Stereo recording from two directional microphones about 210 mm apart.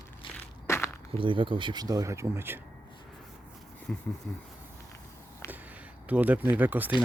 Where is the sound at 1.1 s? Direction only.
25° right (ahead or behind).